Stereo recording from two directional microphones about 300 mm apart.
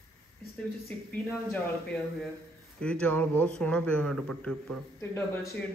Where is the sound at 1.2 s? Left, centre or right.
Centre.